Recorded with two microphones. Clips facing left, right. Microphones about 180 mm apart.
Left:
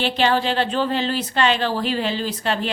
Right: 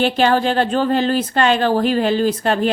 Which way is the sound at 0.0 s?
45° right (ahead or behind).